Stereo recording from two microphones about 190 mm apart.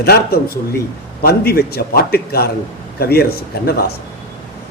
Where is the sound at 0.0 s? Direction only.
55° left (ahead or behind).